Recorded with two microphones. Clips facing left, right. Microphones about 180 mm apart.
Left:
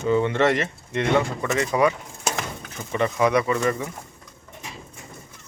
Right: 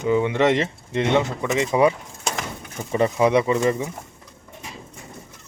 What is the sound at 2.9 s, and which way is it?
Speech, 25° right (ahead or behind).